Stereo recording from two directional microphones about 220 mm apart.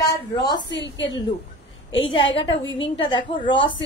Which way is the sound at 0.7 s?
55° left (ahead or behind).